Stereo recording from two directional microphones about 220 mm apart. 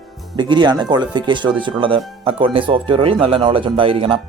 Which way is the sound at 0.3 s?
20° right (ahead or behind).